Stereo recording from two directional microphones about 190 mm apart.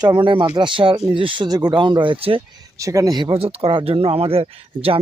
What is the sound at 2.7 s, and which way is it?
Speech, 15° right (ahead or behind).